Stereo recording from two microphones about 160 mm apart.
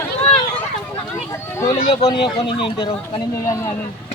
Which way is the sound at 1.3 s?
15° left (ahead or behind).